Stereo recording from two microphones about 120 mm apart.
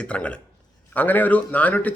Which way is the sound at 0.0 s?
10° left (ahead or behind).